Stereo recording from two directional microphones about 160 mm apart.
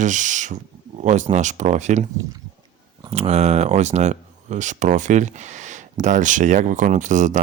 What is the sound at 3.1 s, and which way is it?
Speech, 40° right (ahead or behind).